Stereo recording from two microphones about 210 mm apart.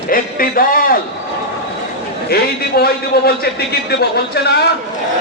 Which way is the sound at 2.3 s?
50° left (ahead or behind).